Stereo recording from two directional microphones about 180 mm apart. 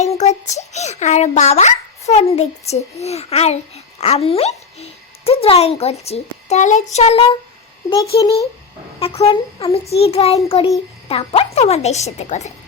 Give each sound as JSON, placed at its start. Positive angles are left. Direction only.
{"t": 0.0, "sound": "a child's voice", "side_deg": 40}
{"t": 7.9, "sound": "a child's voice", "side_deg": 25}